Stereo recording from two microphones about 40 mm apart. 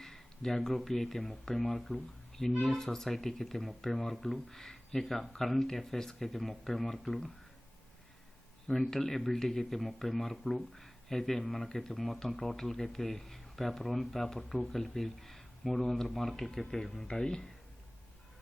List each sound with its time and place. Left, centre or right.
0.0 s a sound: centre
0.8 s speech: centre
8.6 s speech: centre